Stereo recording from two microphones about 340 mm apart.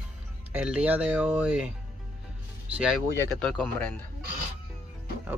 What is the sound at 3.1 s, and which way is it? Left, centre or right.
Speech, centre.